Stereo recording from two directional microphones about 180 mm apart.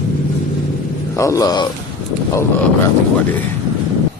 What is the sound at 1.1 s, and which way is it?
Speech, 15° left (ahead or behind).